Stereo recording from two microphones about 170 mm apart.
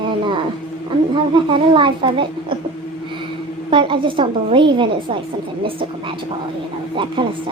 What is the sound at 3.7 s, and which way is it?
A woman's voice, 30° right (ahead or behind).